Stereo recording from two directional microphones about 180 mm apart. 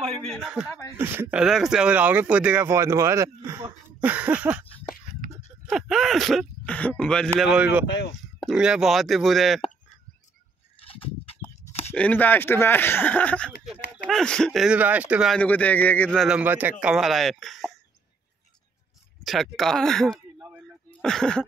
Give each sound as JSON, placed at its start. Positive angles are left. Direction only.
{"t": 0.3, "sound": "speech", "side_deg": -5}
{"t": 5.2, "sound": "a sound", "side_deg": 50}
{"t": 5.7, "sound": "speech", "side_deg": 0}
{"t": 7.8, "sound": "speech", "side_deg": 70}
{"t": 8.4, "sound": "speech", "side_deg": -5}
{"t": 10.9, "sound": "a sound", "side_deg": 30}
{"t": 11.9, "sound": "speech", "side_deg": 10}
{"t": 15.3, "sound": "speech", "side_deg": 10}
{"t": 19.2, "sound": "speech", "side_deg": 0}